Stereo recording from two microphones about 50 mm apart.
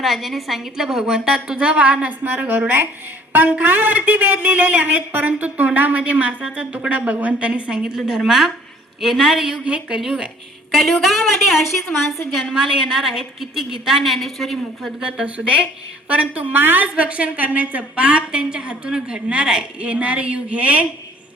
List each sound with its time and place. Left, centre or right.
0.0 s a woman's voice: centre
15.0 s a woman's voice: right
16.6 s a woman's voice: right
16.8 s a woman's voice: right